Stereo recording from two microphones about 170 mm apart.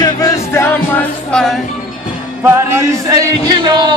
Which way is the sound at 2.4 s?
15° right (ahead or behind).